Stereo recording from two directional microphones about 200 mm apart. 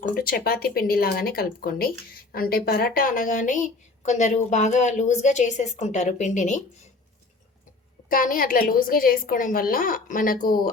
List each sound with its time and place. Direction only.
0.1 s a woman's voice: 50° left (ahead or behind)
8.1 s a woman's voice: 45° left (ahead or behind)